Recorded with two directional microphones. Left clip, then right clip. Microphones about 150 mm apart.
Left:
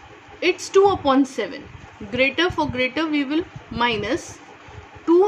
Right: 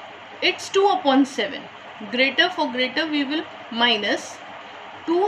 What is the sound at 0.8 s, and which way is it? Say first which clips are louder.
A woman's voice: even; 25° left (ahead or behind).